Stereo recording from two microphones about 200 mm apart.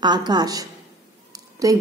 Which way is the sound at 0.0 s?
20° right (ahead or behind).